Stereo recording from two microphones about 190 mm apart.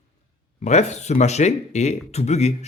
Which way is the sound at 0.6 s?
35° left (ahead or behind).